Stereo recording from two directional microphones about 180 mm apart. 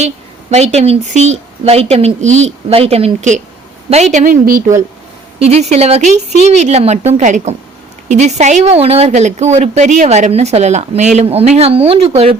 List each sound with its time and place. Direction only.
0.5 s speech: 40° right (ahead or behind)
5.4 s speech: 35° right (ahead or behind)